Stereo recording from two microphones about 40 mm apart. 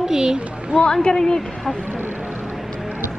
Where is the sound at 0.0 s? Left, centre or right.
Centre.